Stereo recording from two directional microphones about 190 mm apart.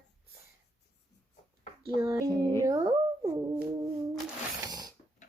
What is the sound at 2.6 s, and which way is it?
Speech, 20° right (ahead or behind).